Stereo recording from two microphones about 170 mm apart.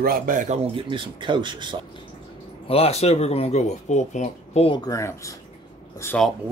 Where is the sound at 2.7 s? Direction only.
35° left (ahead or behind).